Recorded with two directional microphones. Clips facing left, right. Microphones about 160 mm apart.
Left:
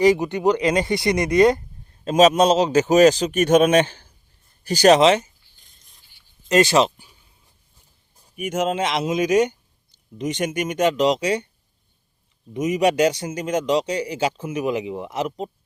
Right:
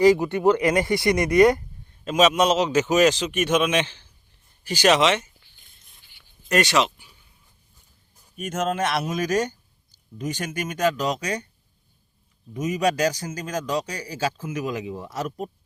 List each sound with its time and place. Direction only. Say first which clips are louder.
0.0 s a man's voice: even; 20° left (ahead or behind)
2.0 s a man's voice: left 4 dB; 35° left (ahead or behind)
6.5 s speech: left 5 dB; 30° left (ahead or behind)
8.4 s a man's voice: left 3 dB; 15° left (ahead or behind)
12.5 s a man's voice: left 4 dB; 20° left (ahead or behind)